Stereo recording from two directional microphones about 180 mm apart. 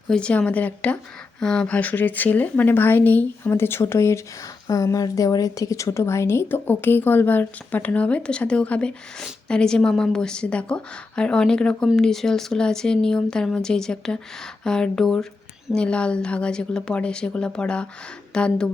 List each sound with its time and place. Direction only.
0.1 s a woman's voice: 5° left (ahead or behind)